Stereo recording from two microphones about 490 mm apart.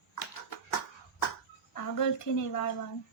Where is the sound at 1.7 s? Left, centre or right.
Left.